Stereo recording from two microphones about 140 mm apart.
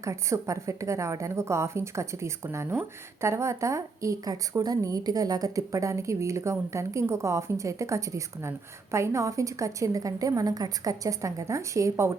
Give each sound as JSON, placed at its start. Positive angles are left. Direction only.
{"t": 0.0, "sound": "a woman's voice", "side_deg": -20}